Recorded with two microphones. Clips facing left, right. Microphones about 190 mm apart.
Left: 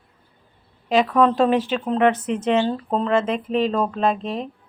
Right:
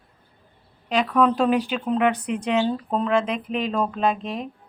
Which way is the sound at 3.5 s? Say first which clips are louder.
Left 5 dB; 35° left (ahead or behind).